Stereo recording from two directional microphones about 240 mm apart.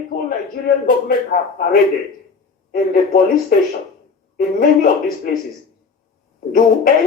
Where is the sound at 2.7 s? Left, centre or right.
Left.